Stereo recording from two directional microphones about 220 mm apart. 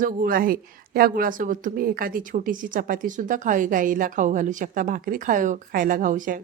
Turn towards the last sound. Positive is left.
turn(degrees=-35)  # may be behind; listen again after turning